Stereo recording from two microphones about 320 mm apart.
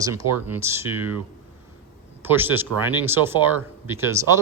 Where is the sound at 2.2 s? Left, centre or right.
Centre.